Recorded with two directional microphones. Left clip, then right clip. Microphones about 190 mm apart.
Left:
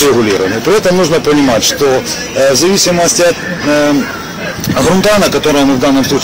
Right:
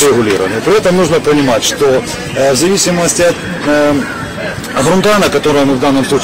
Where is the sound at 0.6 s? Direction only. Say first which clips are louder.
Even; 20° left (ahead or behind).